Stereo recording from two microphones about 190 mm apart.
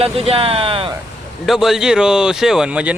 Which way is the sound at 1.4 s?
Centre (ahead or behind).